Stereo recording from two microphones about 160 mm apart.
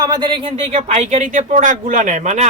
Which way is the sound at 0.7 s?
45° right (ahead or behind).